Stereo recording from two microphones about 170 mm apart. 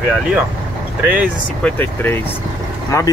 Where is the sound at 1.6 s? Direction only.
10° left (ahead or behind).